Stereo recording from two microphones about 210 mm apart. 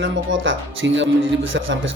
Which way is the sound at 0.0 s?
65° right (ahead or behind).